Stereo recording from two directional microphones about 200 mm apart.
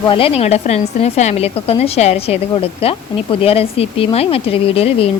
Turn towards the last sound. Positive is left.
turn(degrees=30)  # may be behind; listen again after turning